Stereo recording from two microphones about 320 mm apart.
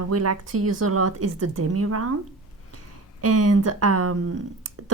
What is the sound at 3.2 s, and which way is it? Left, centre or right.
A woman's voice, right.